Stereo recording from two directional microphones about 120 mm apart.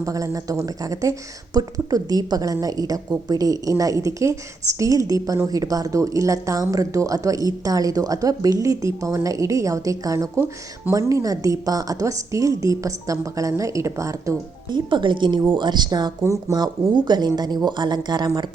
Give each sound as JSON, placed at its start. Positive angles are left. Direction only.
{"t": 0.0, "sound": "a woman's voice", "side_deg": -30}